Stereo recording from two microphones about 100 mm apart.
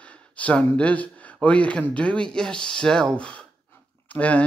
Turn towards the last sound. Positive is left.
turn(degrees=15)  # may be behind; listen again after turning